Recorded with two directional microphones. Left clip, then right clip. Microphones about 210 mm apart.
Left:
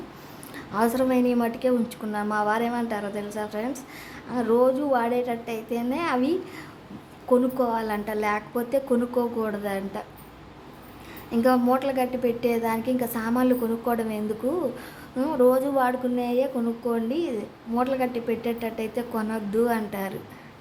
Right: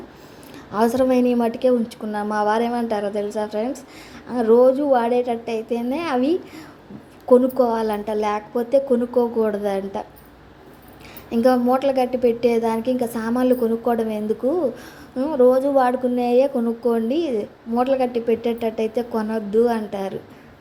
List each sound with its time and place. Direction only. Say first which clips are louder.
0.7 s a woman's voice: right 5 dB; 15° right (ahead or behind)
11.3 s a woman's voice: right 4 dB; 15° right (ahead or behind)